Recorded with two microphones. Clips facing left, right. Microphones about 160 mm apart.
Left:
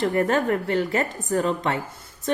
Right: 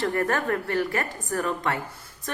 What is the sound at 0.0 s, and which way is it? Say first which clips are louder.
Speech: left 4 dB; 20° left (ahead or behind).